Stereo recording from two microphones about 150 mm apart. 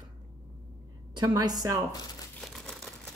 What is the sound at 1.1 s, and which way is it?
Speech, 30° right (ahead or behind).